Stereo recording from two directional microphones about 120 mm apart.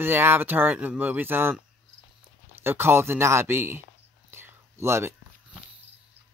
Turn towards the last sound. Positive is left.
turn(degrees=-20)  # may be behind; listen again after turning